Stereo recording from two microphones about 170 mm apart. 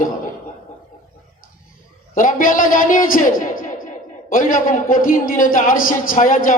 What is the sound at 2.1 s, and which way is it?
A man's voice, 50° left (ahead or behind).